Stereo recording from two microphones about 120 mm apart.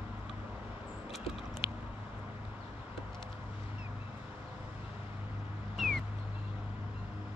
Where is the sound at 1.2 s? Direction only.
50° left (ahead or behind).